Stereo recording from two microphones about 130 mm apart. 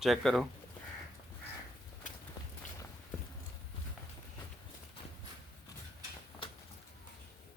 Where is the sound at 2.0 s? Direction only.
80° left.